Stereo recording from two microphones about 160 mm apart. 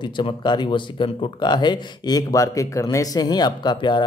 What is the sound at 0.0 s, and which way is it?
Speech, 30° left (ahead or behind).